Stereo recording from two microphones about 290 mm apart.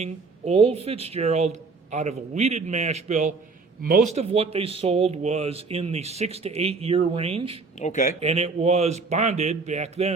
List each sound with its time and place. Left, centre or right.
0.0 s speech: right
7.8 s speech: left
8.2 s speech: right